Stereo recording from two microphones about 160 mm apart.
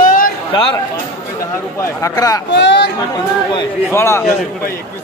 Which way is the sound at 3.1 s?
30° left (ahead or behind).